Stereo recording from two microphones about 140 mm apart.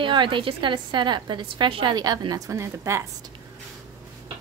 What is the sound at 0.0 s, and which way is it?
A woman's voice, 35° right (ahead or behind).